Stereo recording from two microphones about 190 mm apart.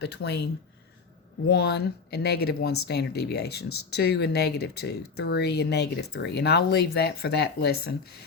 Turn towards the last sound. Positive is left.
turn(degrees=55)  # may be behind; listen again after turning